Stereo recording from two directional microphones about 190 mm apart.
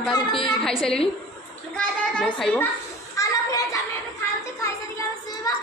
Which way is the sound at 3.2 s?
15° left (ahead or behind).